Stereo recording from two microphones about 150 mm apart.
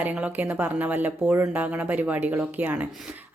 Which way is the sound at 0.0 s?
10° right (ahead or behind).